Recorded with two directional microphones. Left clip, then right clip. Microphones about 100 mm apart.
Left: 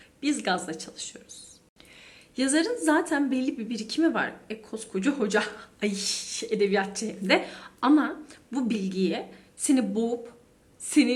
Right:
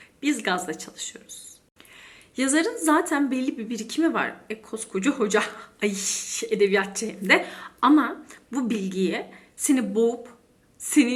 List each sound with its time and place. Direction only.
0.2 s speech: 40° left (ahead or behind)
2.0 s speech: 35° left (ahead or behind)
4.7 s speech: 25° left (ahead or behind)